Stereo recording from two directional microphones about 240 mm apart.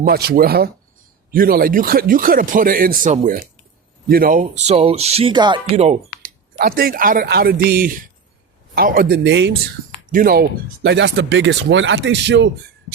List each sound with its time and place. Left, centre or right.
0.0 s speech: right
6.6 s speech: right
10.1 s speech: right
10.8 s speech: right